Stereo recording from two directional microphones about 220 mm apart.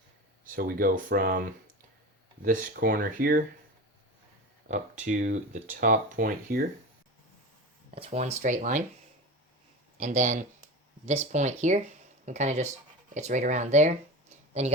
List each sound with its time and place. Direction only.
0.4 s speech: 40° right (ahead or behind)
4.7 s speech: 35° right (ahead or behind)
7.9 s speech: 30° right (ahead or behind)
10.0 s speech: 30° right (ahead or behind)